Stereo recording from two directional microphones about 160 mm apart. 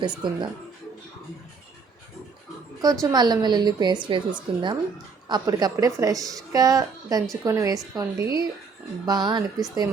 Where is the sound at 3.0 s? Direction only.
25° right (ahead or behind).